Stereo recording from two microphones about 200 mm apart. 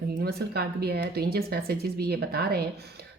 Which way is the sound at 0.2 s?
55° right (ahead or behind).